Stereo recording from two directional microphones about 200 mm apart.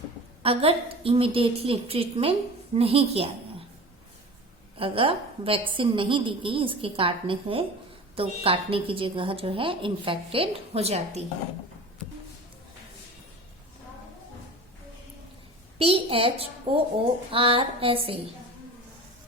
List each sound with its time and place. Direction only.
0.4 s a woman's voice: 30° right (ahead or behind)
4.8 s a woman's voice: 25° right (ahead or behind)
15.8 s a woman's voice: 30° right (ahead or behind)